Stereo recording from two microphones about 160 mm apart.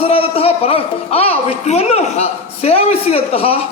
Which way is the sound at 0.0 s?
40° left (ahead or behind).